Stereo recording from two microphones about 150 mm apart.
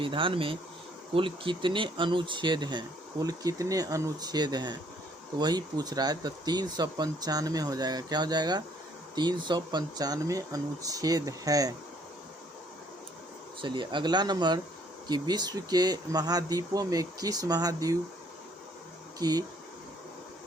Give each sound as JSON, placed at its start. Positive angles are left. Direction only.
{"t": 0.0, "sound": "speech", "side_deg": -35}
{"t": 13.6, "sound": "speech", "side_deg": -30}
{"t": 19.2, "sound": "speech", "side_deg": -25}